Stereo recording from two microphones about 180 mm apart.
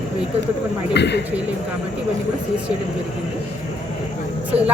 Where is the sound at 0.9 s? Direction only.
70° left (ahead or behind).